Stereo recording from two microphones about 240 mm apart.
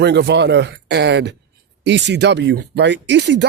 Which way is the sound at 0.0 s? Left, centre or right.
Right.